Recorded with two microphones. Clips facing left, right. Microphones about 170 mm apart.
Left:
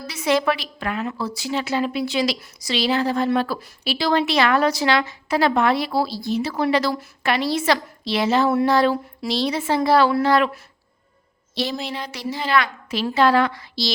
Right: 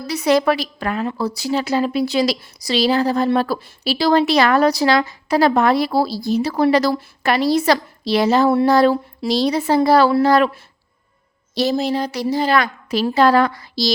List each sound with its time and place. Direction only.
0.1 s a woman's voice: 40° right (ahead or behind)